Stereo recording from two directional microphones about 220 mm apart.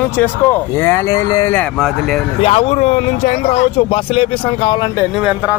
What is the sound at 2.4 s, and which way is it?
Speech, 25° left (ahead or behind).